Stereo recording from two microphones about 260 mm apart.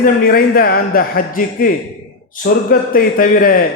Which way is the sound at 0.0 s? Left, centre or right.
Left.